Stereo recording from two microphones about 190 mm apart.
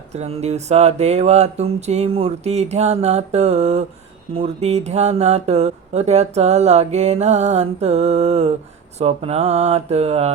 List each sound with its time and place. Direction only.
0.1 s speech: 35° right (ahead or behind)